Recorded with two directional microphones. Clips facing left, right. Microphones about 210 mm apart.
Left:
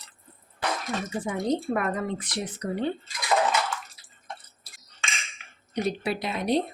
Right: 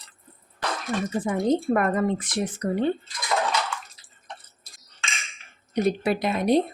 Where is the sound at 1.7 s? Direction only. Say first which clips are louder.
Right 5 dB; 50° right (ahead or behind).